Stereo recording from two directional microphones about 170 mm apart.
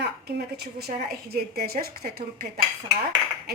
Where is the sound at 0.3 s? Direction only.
70° right (ahead or behind).